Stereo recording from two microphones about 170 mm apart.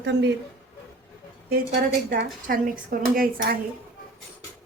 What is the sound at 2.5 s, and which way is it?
Speech, 55° right (ahead or behind).